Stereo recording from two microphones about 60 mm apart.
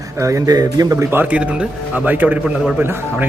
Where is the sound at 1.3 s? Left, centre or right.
Right.